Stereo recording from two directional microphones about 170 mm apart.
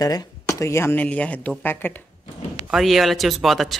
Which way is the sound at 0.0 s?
20° left (ahead or behind).